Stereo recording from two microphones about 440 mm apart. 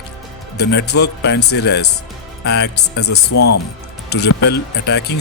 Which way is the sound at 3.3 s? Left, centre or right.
Left.